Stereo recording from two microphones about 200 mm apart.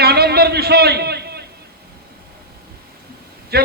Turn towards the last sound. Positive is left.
turn(degrees=-50)  # may be behind; listen again after turning